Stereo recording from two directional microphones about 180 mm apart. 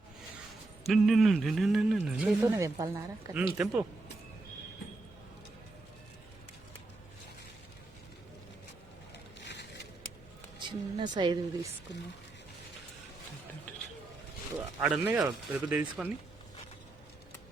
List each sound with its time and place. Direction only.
0.9 s speech: centre (ahead or behind)
2.6 s speech: 20° right (ahead or behind)
3.3 s speech: 5° right (ahead or behind)
9.4 s a sound: 75° left (ahead or behind)
10.6 s a sound: 25° right (ahead or behind)
11.1 s speech: 25° right (ahead or behind)
11.9 s speech: 75° left (ahead or behind)
14.8 s speech: 5° right (ahead or behind)